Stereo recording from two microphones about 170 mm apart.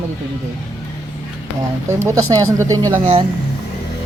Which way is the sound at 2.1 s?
20° right (ahead or behind).